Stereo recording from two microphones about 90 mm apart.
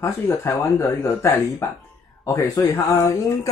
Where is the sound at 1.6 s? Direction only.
30° left (ahead or behind).